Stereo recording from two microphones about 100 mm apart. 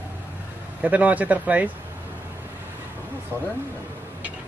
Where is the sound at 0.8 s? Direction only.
15° right (ahead or behind).